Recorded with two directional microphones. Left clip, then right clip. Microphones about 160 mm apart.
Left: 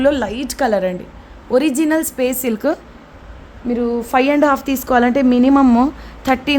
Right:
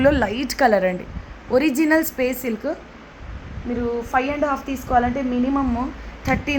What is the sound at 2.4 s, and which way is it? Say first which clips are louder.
Speech: left 7 dB; 35° left (ahead or behind).